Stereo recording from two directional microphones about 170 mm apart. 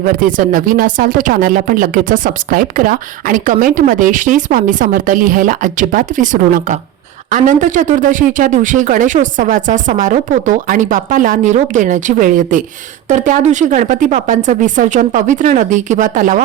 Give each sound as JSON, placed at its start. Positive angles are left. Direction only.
{"t": 0.0, "sound": "speech", "side_deg": -55}